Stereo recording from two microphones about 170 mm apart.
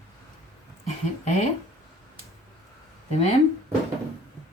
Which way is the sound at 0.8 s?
40° left (ahead or behind).